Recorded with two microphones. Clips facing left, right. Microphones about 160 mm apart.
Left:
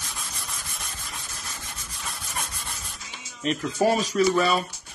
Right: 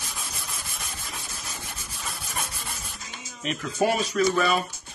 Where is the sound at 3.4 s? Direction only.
35° left (ahead or behind).